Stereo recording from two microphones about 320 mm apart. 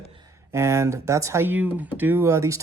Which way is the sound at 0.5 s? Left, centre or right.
Centre.